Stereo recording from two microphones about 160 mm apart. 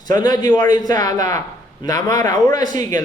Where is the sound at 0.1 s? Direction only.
25° left (ahead or behind).